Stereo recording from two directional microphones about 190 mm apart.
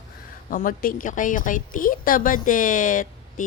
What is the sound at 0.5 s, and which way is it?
Speech, 45° left (ahead or behind).